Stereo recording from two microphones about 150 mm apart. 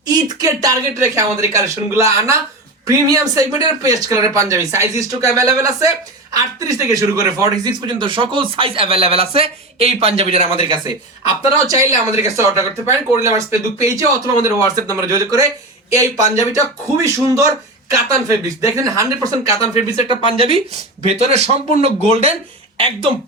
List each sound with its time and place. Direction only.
0.1 s speech: 25° right (ahead or behind)
11.4 s speech: 20° right (ahead or behind)
19.6 s speech: 45° left (ahead or behind)
20.1 s speech: 40° right (ahead or behind)